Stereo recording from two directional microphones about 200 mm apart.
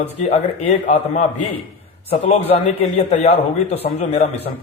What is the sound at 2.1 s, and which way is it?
A man's voice, 30° left (ahead or behind).